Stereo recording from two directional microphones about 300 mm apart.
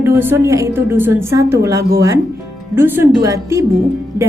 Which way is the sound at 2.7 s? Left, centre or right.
Centre.